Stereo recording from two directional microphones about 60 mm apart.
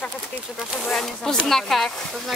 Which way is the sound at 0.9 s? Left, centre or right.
Centre.